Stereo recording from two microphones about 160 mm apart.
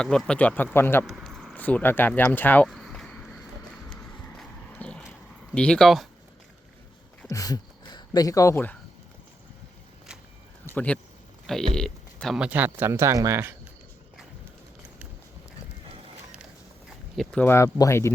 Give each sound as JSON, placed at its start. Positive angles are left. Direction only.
{"t": 0.0, "sound": "speech", "side_deg": 5}
{"t": 1.0, "sound": "speech", "side_deg": 0}
{"t": 2.6, "sound": "a sound", "side_deg": 0}
{"t": 7.3, "sound": "speech", "side_deg": 20}
{"t": 10.8, "sound": "speech", "side_deg": 10}
{"t": 17.2, "sound": "speech", "side_deg": 10}